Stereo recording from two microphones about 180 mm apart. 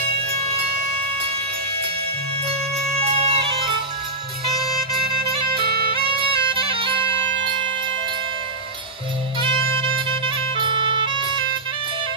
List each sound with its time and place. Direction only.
3.0 s bagpipes: 35° right (ahead or behind)
5.9 s bagpipes: 30° right (ahead or behind)
9.8 s music: 30° right (ahead or behind)